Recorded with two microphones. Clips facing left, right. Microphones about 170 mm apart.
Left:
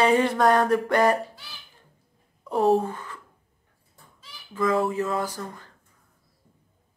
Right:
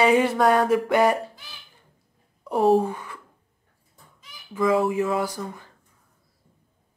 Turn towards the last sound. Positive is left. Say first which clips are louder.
# right 3 dB
turn(degrees=-10)  # may be behind; listen again after turning